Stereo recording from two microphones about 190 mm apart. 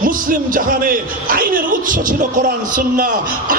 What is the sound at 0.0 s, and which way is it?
Speech, 45° right (ahead or behind).